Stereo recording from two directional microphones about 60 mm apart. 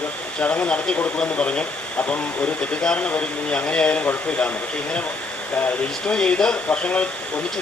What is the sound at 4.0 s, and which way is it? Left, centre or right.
Speech, left.